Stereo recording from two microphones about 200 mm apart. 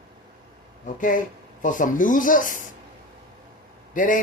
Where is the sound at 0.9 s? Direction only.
40° left (ahead or behind).